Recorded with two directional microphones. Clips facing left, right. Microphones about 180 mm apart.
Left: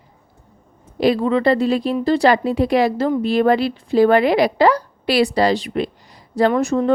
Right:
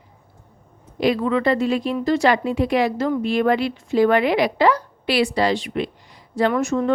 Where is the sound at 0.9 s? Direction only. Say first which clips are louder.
Left 3 dB; 35° left (ahead or behind).